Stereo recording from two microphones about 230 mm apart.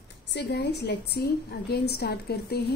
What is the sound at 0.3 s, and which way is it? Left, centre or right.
A woman's voice, left.